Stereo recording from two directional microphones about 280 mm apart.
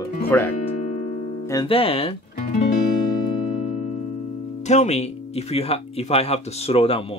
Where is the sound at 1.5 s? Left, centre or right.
Centre.